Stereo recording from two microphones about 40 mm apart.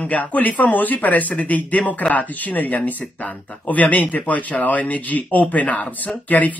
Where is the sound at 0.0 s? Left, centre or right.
Left.